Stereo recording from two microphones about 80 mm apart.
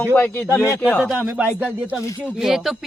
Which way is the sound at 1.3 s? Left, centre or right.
Right.